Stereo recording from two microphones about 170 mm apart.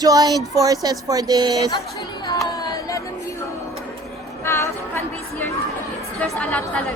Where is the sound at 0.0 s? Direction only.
20° right (ahead or behind).